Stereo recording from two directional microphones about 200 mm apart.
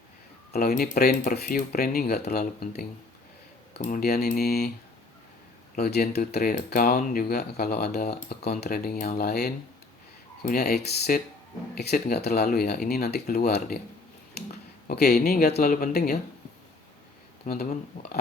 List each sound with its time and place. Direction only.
0.5 s speech: 50° left (ahead or behind)
5.7 s speech: 50° left (ahead or behind)
14.8 s speech: 50° left (ahead or behind)
17.4 s speech: 45° left (ahead or behind)